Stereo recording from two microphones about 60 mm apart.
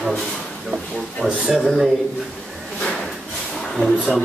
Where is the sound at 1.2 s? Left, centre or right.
Centre.